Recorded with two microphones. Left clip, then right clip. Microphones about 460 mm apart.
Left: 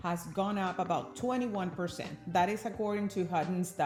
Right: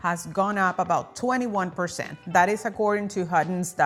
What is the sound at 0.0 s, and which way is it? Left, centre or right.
Speech, right.